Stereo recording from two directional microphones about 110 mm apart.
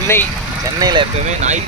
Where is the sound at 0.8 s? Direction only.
40° right (ahead or behind).